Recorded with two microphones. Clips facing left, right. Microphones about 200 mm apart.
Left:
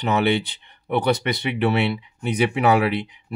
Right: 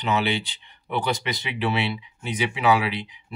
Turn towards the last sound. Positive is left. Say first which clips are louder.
# left 6 dB
turn(degrees=55)  # may be behind; listen again after turning